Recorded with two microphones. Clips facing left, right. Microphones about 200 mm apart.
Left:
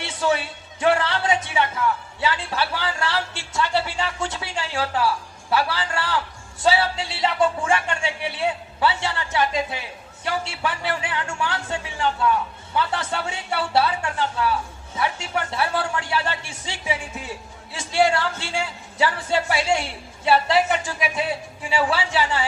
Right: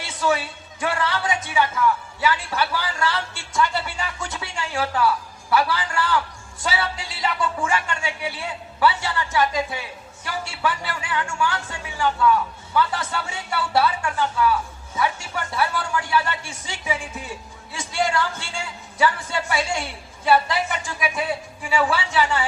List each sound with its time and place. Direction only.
0.0 s a woman's voice: 25° left (ahead or behind)